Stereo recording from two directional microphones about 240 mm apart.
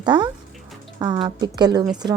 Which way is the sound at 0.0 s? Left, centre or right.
Centre.